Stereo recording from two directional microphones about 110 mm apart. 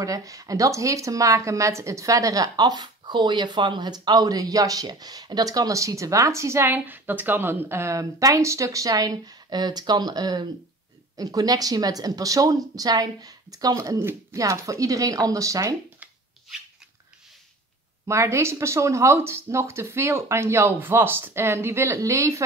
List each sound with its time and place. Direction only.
0.0 s speech: 30° right (ahead or behind)
18.0 s speech: 25° right (ahead or behind)